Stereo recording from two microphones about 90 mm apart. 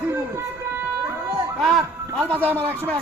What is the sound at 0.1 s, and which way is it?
Music, 30° right (ahead or behind).